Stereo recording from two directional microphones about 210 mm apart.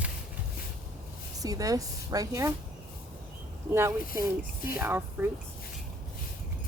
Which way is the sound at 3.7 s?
10° right (ahead or behind).